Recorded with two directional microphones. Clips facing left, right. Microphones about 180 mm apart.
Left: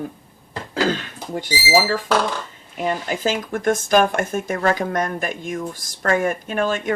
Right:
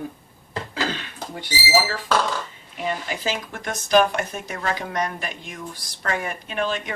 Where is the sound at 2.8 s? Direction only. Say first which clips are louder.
Left 5 dB; 45° left (ahead or behind).